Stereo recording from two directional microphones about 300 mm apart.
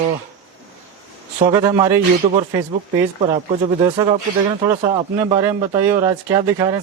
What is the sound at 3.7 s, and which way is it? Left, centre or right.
Speech, centre.